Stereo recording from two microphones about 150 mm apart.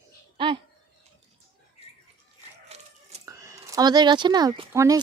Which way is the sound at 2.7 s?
45° right (ahead or behind).